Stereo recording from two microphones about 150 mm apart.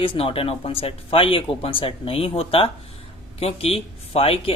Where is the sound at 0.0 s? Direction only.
35° left (ahead or behind).